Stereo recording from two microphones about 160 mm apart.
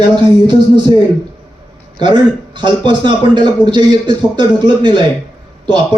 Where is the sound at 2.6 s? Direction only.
30° right (ahead or behind).